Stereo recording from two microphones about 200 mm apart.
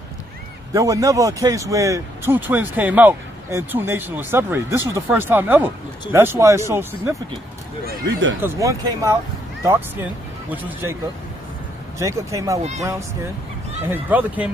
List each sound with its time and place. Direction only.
0.7 s speech: 15° right (ahead or behind)
7.9 s speech: 60° right (ahead or behind)
8.4 s speech: 15° right (ahead or behind)
10.8 s speech: 15° right (ahead or behind)
13.9 s speech: 10° right (ahead or behind)